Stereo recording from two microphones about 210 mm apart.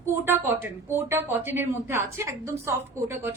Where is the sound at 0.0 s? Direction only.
10° right (ahead or behind).